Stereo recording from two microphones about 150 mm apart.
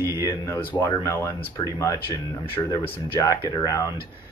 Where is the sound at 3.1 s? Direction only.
25° left (ahead or behind).